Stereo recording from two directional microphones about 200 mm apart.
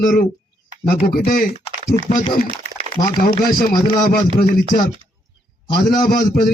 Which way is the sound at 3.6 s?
45° left (ahead or behind).